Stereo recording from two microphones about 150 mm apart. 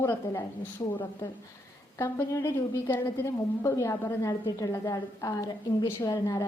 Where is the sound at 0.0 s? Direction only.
15° left (ahead or behind).